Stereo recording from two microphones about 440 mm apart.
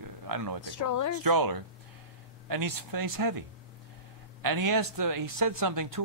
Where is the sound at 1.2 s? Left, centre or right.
Right.